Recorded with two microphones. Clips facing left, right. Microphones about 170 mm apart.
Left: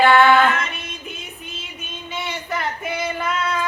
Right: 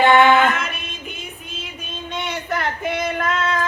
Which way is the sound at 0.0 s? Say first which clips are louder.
Right 1 dB; 20° right (ahead or behind).